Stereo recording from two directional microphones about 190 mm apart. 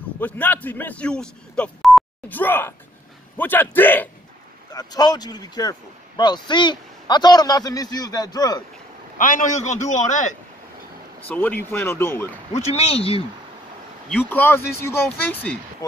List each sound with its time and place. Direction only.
0.2 s speech: 10° left (ahead or behind)
4.7 s speech: 20° left (ahead or behind)
9.2 s a man's voice: 45° left (ahead or behind)
11.2 s speech: 10° left (ahead or behind)
12.5 s a man's voice: 35° left (ahead or behind)
14.0 s speech: 10° left (ahead or behind)